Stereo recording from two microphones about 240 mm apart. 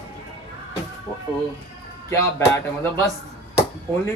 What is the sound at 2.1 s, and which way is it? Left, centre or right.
Speech, centre.